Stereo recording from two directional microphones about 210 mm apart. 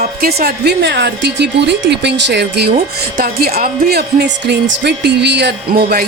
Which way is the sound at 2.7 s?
40° right (ahead or behind).